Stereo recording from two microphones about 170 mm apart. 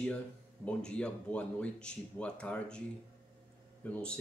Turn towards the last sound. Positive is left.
turn(degrees=5)  # may be behind; listen again after turning